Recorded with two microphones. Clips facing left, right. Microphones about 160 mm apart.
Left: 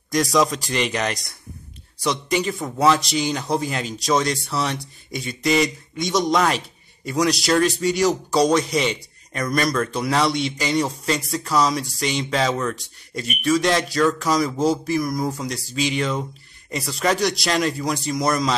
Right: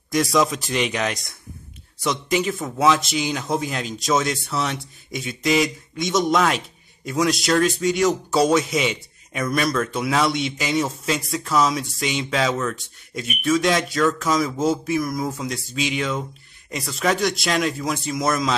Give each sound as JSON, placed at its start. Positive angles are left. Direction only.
{"t": 0.1, "sound": "speech", "side_deg": 0}